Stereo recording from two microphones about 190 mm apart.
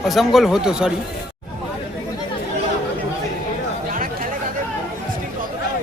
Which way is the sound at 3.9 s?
45° right (ahead or behind).